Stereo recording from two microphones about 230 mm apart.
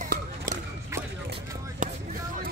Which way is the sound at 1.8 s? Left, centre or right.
Right.